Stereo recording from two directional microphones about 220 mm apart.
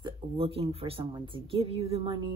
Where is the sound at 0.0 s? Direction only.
25° right (ahead or behind).